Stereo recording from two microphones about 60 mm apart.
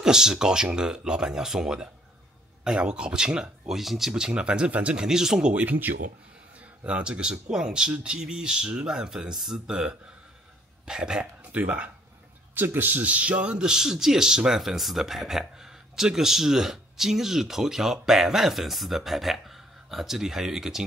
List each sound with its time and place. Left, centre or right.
0.0 s a man's voice: centre
4.1 s a man's voice: centre
5.0 s a man's voice: centre
5.5 s speech: right
6.8 s a man's voice: centre
11.5 s speech: right
12.5 s a man's voice: right; by 20.8 s centre